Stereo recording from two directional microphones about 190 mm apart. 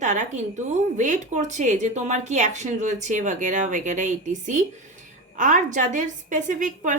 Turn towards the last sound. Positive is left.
turn(degrees=-40)  # may be behind; listen again after turning